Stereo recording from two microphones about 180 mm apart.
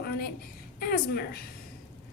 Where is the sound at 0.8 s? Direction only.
60° left (ahead or behind).